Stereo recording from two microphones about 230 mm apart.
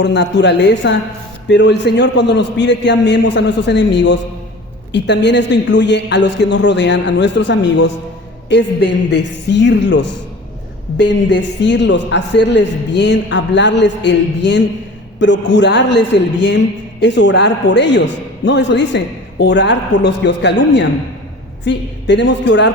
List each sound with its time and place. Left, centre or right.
0.0 s a man's voice: left